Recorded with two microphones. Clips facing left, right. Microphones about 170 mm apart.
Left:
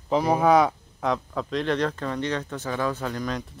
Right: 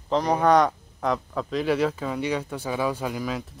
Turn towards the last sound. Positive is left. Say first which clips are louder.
# even
turn(degrees=-5)  # may be behind; listen again after turning